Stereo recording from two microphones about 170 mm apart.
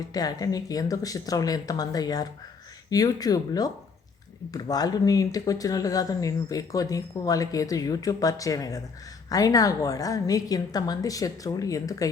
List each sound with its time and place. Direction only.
0.1 s speech: 20° left (ahead or behind)